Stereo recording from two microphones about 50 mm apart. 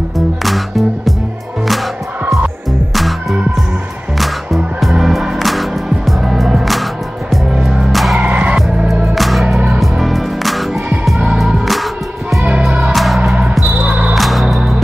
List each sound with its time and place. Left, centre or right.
0.4 s music: centre
2.9 s music: centre
7.9 s music: centre
8.2 s music: right
9.1 s music: centre
12.9 s music: centre
13.2 s music: right
14.1 s music: centre